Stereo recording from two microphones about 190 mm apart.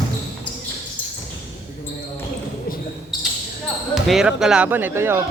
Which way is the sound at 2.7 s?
50° left (ahead or behind).